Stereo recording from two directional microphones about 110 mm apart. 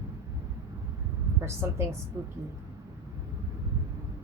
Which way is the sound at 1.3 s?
25° right (ahead or behind).